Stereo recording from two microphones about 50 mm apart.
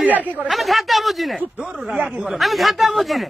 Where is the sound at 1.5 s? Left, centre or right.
Centre.